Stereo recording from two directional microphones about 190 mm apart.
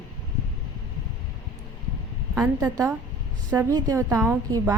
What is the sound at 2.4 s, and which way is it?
A woman's voice, 15° right (ahead or behind).